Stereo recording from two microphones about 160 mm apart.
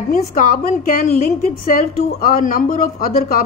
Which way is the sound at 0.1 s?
60° left (ahead or behind).